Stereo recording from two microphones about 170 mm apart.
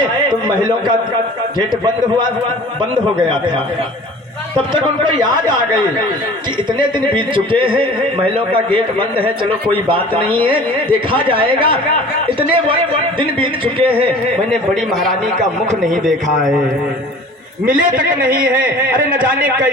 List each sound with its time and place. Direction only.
0.3 s a man's voice: 25° right (ahead or behind)
4.7 s a man's voice: 25° right (ahead or behind)
17.7 s a man's voice: 55° right (ahead or behind)